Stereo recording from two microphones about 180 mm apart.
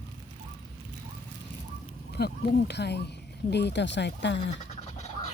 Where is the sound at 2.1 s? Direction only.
65° left (ahead or behind).